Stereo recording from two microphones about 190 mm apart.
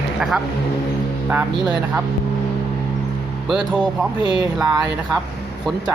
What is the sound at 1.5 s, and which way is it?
Speech, 20° right (ahead or behind).